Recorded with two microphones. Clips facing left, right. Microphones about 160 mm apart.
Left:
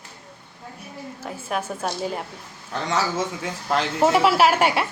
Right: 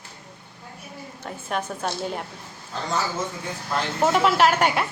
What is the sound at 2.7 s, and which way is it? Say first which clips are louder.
Speech: left 3 dB; 90° left.